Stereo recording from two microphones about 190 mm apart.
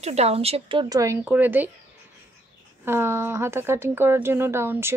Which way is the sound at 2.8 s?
10° right (ahead or behind).